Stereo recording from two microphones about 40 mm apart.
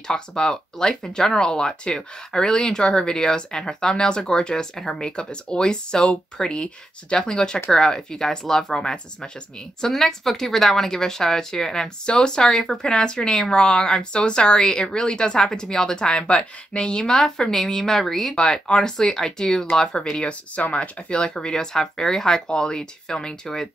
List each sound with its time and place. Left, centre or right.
0.1 s a woman's voice: centre
17.0 s a woman's voice: centre
18.3 s a woman's voice: centre